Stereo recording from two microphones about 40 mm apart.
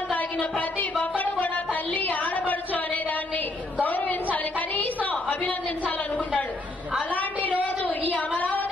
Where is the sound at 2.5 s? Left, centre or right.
Left.